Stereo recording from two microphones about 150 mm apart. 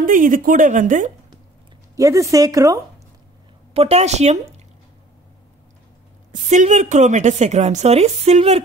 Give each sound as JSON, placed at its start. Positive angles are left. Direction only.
{"t": 0.0, "sound": "speech", "side_deg": -65}
{"t": 2.0, "sound": "a woman's voice", "side_deg": -20}
{"t": 3.7, "sound": "a woman's voice", "side_deg": -45}
{"t": 6.3, "sound": "a woman's voice", "side_deg": -55}